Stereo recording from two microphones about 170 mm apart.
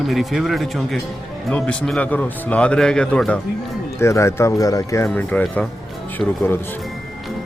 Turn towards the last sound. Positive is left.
turn(degrees=10)  # may be behind; listen again after turning